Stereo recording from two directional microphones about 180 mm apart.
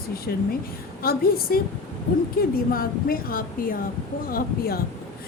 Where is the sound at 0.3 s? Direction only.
60° left (ahead or behind).